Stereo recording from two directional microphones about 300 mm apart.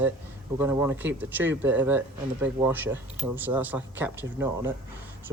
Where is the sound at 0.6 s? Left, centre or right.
Centre.